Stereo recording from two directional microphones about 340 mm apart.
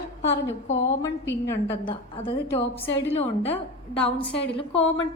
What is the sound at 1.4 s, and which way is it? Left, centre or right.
A woman's voice, centre.